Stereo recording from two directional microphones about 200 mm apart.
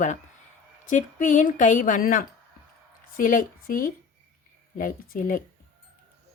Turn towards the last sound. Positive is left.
turn(degrees=45)  # may be behind; listen again after turning